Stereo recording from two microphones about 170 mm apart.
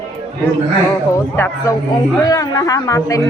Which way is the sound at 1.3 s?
15° left (ahead or behind).